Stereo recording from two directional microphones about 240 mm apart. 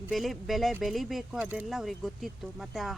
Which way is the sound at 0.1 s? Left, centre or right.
Centre.